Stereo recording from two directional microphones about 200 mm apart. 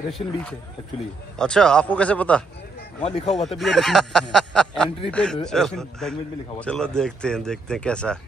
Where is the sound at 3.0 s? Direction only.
30° left (ahead or behind).